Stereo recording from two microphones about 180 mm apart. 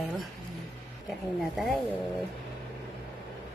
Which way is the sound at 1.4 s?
Centre (ahead or behind).